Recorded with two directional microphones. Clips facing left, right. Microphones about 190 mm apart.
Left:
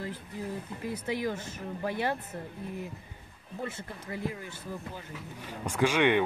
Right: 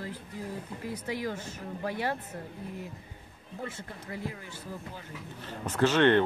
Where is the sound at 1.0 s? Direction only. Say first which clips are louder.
Left 2 dB; 20° left (ahead or behind).